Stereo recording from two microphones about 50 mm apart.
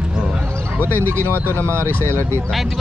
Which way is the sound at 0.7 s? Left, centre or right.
Right.